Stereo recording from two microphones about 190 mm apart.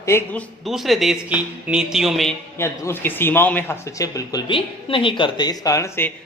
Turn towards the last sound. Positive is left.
turn(degrees=15)  # may be behind; listen again after turning